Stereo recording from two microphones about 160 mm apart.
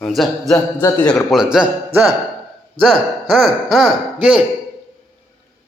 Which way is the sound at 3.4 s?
Centre (ahead or behind).